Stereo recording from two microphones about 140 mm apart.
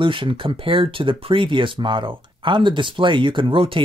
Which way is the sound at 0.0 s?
35° right (ahead or behind).